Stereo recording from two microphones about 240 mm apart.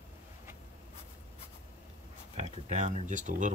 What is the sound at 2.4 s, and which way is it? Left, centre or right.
Speech, right.